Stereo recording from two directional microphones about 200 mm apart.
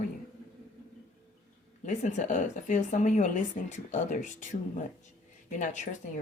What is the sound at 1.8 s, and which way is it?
A woman's voice, 35° left (ahead or behind).